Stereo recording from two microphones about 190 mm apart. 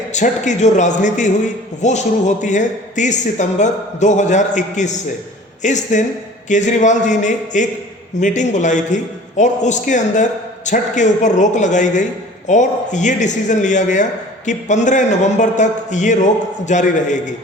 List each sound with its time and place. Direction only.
0.1 s a man's voice: 40° left (ahead or behind)